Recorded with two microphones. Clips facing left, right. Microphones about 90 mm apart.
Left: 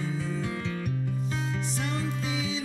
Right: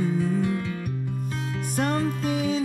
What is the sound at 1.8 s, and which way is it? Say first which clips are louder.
Music: right 11 dB; 50° right (ahead or behind).